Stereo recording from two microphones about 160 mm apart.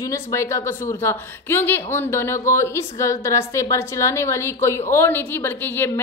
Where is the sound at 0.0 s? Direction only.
20° left (ahead or behind).